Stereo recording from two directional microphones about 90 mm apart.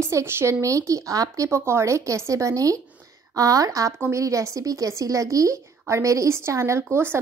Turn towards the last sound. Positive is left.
turn(degrees=-25)  # may be behind; listen again after turning